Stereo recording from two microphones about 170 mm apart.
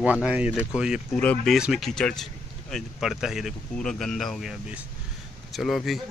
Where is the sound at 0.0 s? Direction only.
10° right (ahead or behind).